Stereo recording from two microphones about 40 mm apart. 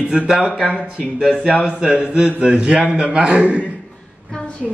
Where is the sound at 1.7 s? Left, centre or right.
Right.